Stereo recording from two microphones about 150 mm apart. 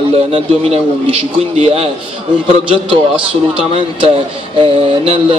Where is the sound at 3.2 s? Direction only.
35° right (ahead or behind).